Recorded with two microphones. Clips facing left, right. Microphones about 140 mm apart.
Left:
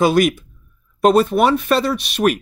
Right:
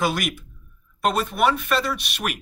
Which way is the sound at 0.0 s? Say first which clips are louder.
Left 10 dB; 35° left (ahead or behind).